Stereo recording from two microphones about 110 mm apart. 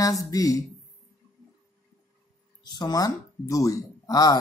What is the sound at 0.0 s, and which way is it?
Speech, 30° left (ahead or behind).